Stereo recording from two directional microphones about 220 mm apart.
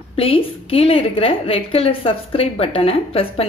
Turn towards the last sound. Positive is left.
turn(degrees=25)  # may be behind; listen again after turning